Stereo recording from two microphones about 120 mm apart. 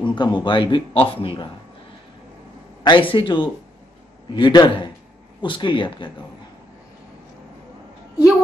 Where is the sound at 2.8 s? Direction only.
45° left (ahead or behind).